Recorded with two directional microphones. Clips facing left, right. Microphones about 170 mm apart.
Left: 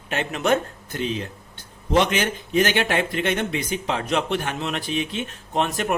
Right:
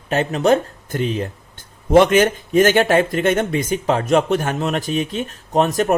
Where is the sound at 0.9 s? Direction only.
50° right (ahead or behind).